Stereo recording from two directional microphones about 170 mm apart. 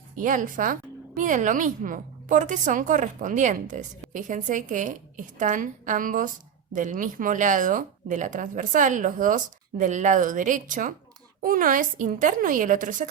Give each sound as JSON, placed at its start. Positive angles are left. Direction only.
{"t": 0.2, "sound": "speech", "side_deg": -50}